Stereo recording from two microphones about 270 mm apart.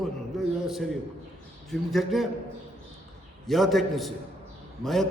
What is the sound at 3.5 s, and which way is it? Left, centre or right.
A man's voice, centre.